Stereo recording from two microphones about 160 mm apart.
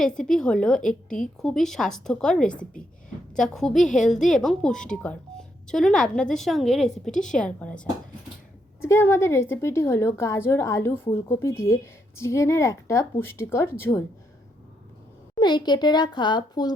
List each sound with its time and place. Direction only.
0.2 s a woman's voice: 5° left (ahead or behind)
8.8 s a woman's voice: 15° left (ahead or behind)
15.4 s a woman's voice: 25° left (ahead or behind)